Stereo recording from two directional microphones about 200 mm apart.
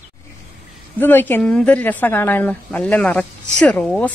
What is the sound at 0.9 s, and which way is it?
Speech, 10° left (ahead or behind).